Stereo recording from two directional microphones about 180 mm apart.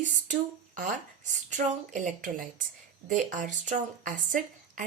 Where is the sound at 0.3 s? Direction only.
45° right (ahead or behind).